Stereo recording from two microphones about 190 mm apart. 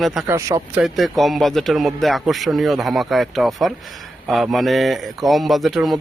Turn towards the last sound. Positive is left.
turn(degrees=0)  # may be behind; listen again after turning